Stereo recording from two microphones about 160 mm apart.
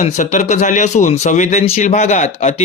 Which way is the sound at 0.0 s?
45° left (ahead or behind).